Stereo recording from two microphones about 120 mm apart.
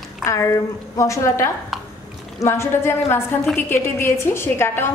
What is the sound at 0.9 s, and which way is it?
A woman's voice, 25° left (ahead or behind).